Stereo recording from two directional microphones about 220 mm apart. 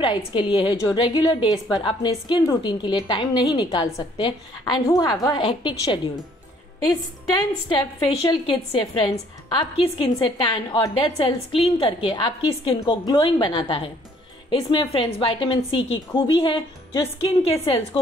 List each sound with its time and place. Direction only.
0.0 s a woman's voice: 20° left (ahead or behind)
7.7 s a woman's voice: 20° left (ahead or behind)